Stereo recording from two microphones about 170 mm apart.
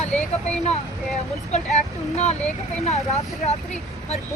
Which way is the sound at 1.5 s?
40° left (ahead or behind).